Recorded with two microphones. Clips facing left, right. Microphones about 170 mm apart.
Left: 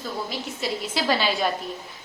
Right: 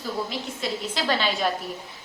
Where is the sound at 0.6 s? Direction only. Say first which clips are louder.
Left 2 dB; 5° left (ahead or behind).